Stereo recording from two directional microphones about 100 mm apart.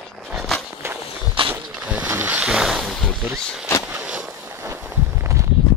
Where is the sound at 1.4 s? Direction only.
65° right (ahead or behind).